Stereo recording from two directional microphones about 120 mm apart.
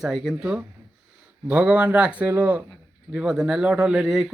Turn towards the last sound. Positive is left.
turn(degrees=-5)  # may be behind; listen again after turning